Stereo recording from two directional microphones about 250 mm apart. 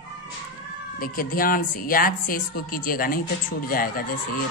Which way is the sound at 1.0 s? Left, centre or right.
Left.